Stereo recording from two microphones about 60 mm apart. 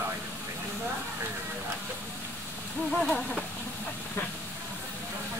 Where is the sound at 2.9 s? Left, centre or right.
Centre.